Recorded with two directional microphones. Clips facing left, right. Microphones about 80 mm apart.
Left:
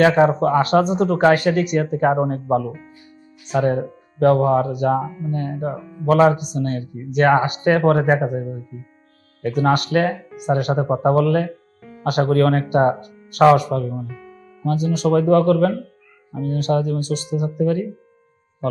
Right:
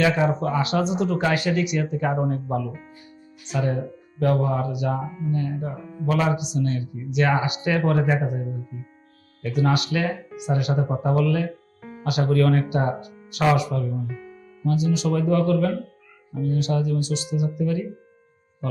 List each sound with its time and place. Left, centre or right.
0.0 s speech: left